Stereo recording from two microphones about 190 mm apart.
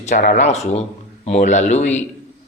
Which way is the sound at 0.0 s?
45° left (ahead or behind).